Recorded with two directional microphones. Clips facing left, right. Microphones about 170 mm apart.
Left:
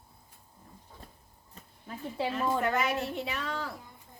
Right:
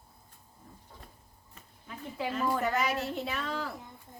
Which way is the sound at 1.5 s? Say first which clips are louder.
Left 3 dB; 35° left (ahead or behind).